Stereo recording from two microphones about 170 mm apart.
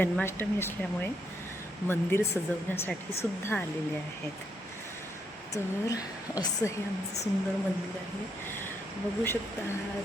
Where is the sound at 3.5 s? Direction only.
10° left (ahead or behind).